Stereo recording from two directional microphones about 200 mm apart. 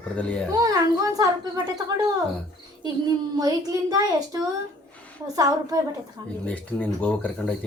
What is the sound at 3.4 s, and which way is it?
A woman's voice, 20° right (ahead or behind).